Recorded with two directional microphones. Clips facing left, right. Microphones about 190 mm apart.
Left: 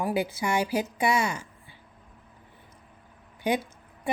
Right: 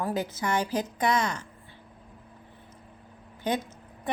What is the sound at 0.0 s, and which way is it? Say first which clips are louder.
A woman's voice: left 2 dB; 10° left (ahead or behind).